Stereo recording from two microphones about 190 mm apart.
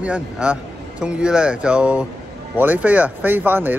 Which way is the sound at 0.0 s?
5° right (ahead or behind).